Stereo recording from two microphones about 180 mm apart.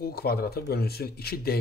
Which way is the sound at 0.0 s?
60° left (ahead or behind).